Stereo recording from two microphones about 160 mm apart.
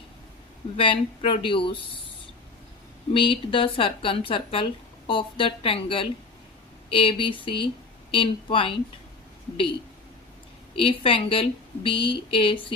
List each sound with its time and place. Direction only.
0.8 s a woman's voice: 35° left (ahead or behind)
3.1 s a woman's voice: 35° left (ahead or behind)
10.8 s a woman's voice: 35° left (ahead or behind)